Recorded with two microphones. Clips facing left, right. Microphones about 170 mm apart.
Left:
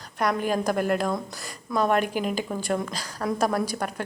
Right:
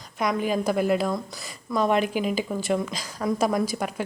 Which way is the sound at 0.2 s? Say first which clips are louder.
Even; 10° right (ahead or behind).